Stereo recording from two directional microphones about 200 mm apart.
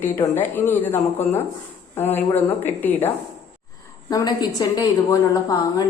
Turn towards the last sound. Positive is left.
turn(degrees=20)  # may be behind; listen again after turning